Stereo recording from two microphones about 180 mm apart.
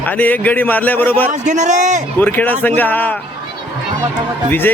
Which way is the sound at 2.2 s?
10° left (ahead or behind).